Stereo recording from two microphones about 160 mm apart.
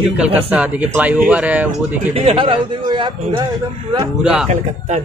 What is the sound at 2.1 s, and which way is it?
A man's voice, 35° right (ahead or behind).